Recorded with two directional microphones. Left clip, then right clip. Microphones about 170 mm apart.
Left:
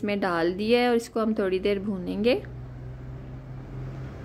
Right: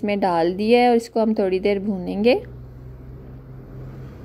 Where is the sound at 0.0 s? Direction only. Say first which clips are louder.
Right 6 dB; 25° right (ahead or behind).